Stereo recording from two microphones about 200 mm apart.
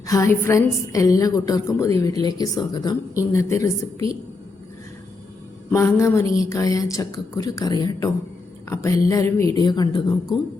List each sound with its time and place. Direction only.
0.1 s a woman's voice: 15° left (ahead or behind)
5.7 s a woman's voice: 15° left (ahead or behind)